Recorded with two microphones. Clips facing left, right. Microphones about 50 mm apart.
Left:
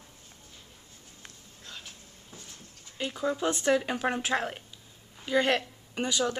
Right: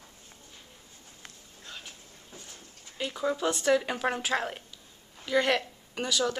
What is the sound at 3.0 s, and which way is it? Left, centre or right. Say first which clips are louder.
Speech: even; centre.